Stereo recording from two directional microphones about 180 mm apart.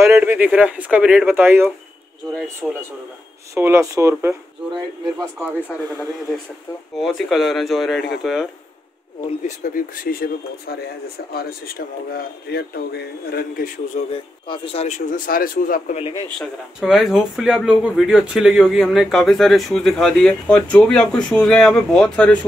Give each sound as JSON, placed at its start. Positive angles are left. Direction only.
{"t": 0.0, "sound": "speech", "side_deg": -10}
{"t": 5.7, "sound": "speech", "side_deg": 10}
{"t": 7.0, "sound": "speech", "side_deg": 0}
{"t": 9.6, "sound": "speech", "side_deg": 50}
{"t": 14.1, "sound": "speech", "side_deg": 30}
{"t": 16.3, "sound": "speech", "side_deg": 0}